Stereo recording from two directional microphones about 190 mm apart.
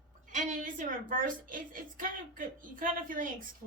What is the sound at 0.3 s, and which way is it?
A woman's voice, 45° right (ahead or behind).